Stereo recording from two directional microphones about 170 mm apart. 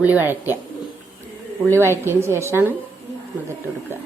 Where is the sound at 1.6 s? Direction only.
15° right (ahead or behind).